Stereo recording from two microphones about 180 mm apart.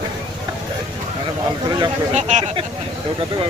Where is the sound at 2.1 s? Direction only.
40° right (ahead or behind).